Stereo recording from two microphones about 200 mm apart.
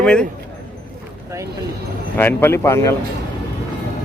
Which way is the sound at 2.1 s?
10° left (ahead or behind).